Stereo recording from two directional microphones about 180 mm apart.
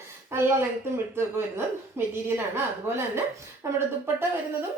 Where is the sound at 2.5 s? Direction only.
15° right (ahead or behind).